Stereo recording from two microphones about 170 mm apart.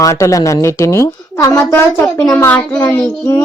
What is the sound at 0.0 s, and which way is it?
A woman's voice, 20° left (ahead or behind).